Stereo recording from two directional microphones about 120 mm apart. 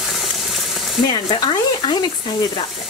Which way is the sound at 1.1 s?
40° left (ahead or behind).